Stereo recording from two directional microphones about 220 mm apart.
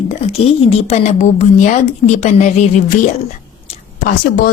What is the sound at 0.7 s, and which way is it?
A woman's voice, 30° left (ahead or behind).